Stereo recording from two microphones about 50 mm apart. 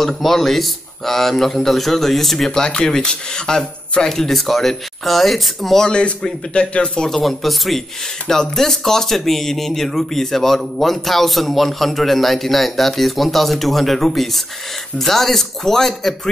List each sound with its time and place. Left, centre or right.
0.0 s speech: centre
5.9 s a man's voice: centre
7.1 s speech: centre